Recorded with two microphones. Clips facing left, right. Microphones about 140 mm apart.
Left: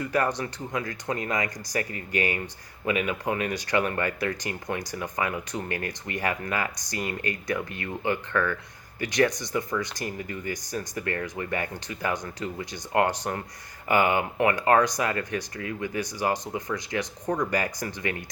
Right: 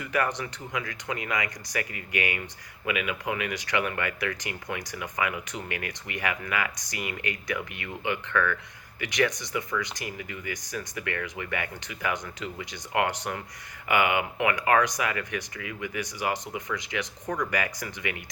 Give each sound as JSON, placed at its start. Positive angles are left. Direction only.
{"t": 0.0, "sound": "speech", "side_deg": 30}